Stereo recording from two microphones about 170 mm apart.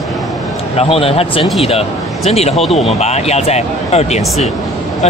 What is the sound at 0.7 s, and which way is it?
Speech, 35° left (ahead or behind).